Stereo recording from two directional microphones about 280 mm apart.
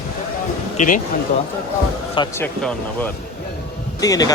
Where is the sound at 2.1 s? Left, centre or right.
Centre.